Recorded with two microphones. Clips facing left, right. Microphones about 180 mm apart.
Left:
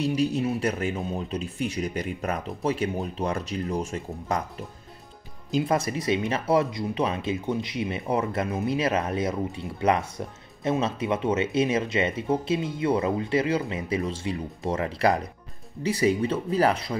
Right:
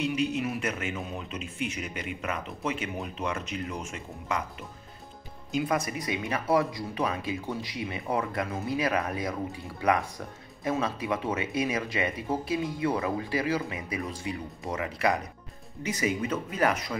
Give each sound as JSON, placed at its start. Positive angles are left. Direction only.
{"t": 0.0, "sound": "speech", "side_deg": 35}